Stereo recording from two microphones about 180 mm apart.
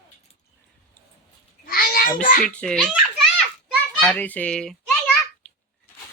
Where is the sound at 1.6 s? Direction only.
55° left (ahead or behind).